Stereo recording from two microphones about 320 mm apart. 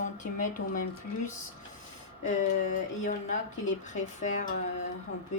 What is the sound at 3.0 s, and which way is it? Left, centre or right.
A woman's voice, left.